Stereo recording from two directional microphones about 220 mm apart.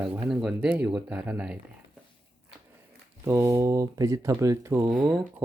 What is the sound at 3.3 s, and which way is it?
Speech, 15° right (ahead or behind).